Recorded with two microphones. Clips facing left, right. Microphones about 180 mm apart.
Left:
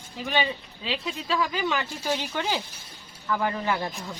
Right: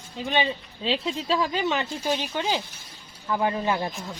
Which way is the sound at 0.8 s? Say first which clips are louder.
Right 4 dB; 30° right (ahead or behind).